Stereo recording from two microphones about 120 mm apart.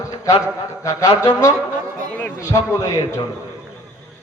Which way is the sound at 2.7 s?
25° left (ahead or behind).